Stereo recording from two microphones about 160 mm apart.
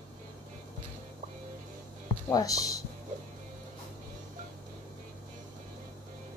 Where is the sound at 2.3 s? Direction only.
20° left (ahead or behind).